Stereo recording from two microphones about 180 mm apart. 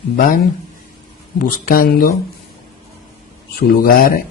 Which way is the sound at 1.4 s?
50° left (ahead or behind).